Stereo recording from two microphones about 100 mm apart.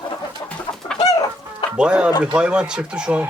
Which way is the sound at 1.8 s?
10° right (ahead or behind).